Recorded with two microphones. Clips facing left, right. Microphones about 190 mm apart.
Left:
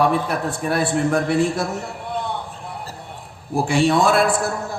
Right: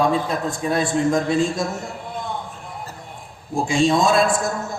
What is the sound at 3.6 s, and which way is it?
Speech, 65° left (ahead or behind).